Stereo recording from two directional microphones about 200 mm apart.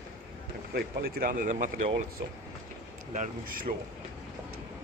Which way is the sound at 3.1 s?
40° right (ahead or behind).